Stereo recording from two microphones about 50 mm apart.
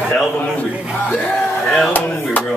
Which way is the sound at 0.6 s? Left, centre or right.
Left.